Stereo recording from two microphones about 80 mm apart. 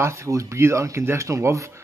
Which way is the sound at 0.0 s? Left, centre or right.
Right.